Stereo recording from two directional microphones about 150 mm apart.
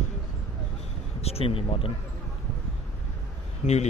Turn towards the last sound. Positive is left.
turn(degrees=50)  # may be behind; listen again after turning